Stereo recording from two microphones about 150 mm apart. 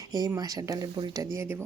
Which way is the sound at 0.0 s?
25° right (ahead or behind).